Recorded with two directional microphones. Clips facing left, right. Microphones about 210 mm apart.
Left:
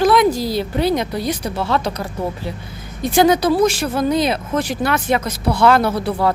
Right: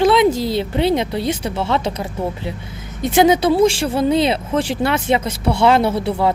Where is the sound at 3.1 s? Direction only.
20° right (ahead or behind).